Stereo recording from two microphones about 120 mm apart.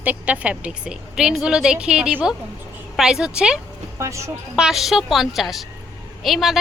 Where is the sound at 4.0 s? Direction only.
25° right (ahead or behind).